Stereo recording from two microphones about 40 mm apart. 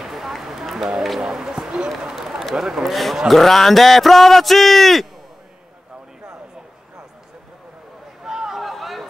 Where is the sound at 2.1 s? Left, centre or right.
Centre.